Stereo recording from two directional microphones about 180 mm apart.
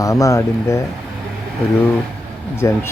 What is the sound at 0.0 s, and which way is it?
Speech, 20° left (ahead or behind).